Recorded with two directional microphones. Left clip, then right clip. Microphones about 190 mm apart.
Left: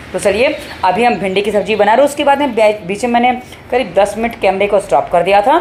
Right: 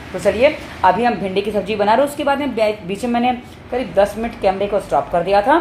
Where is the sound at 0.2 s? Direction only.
25° left (ahead or behind).